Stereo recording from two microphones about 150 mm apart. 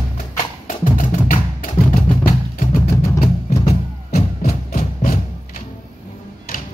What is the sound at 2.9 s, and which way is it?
Music, 20° left (ahead or behind).